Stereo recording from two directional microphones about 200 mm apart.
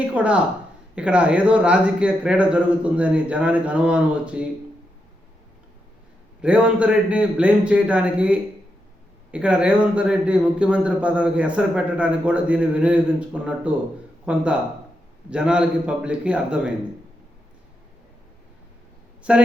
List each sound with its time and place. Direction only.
0.0 s a man's voice: 5° right (ahead or behind)
6.4 s a man's voice: 5° right (ahead or behind)
19.3 s a man's voice: 5° right (ahead or behind)